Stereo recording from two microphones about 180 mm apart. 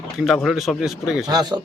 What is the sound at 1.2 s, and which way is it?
Speech, 20° right (ahead or behind).